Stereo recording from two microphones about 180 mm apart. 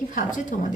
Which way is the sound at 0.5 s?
45° left (ahead or behind).